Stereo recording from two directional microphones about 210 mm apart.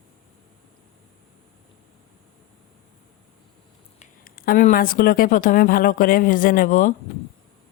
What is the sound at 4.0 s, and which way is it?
Speech, 45° left (ahead or behind).